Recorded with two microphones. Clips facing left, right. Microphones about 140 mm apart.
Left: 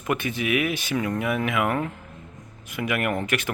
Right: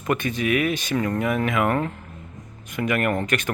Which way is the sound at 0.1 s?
10° left (ahead or behind).